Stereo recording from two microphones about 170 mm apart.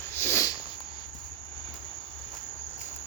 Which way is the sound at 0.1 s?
15° left (ahead or behind).